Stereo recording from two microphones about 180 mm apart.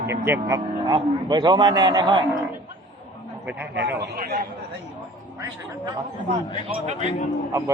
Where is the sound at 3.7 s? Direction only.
70° right (ahead or behind).